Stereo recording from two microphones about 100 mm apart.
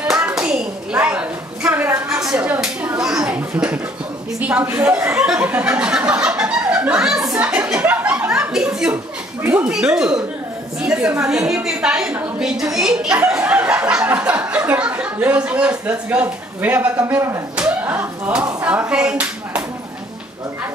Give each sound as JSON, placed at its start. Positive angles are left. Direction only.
{"t": 0.0, "sound": "clapping", "side_deg": -10}
{"t": 3.3, "sound": "a sound", "side_deg": -15}
{"t": 4.4, "sound": "speech", "side_deg": -15}
{"t": 7.3, "sound": "chuckle", "side_deg": -10}
{"t": 8.9, "sound": "chuckle", "side_deg": -20}
{"t": 9.7, "sound": "a woman's voice", "side_deg": -5}
{"t": 17.6, "sound": "slap", "side_deg": -15}
{"t": 18.2, "sound": "speech", "side_deg": -15}